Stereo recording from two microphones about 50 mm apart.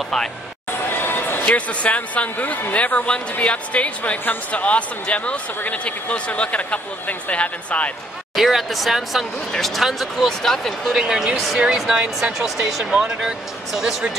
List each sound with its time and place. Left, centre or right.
0.7 s a sound: left
1.5 s speech: left
8.4 s speech: centre